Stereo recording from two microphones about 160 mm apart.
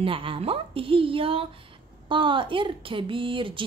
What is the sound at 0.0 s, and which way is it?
A woman's voice, 35° right (ahead or behind).